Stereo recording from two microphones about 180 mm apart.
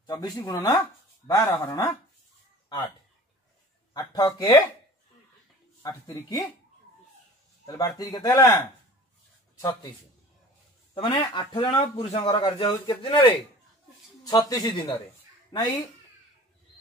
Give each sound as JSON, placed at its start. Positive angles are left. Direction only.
{"t": 0.0, "sound": "speech", "side_deg": 20}
{"t": 3.9, "sound": "a man's voice", "side_deg": 20}
{"t": 5.8, "sound": "a man's voice", "side_deg": 20}
{"t": 7.6, "sound": "a man's voice", "side_deg": 20}
{"t": 11.0, "sound": "a man's voice", "side_deg": 30}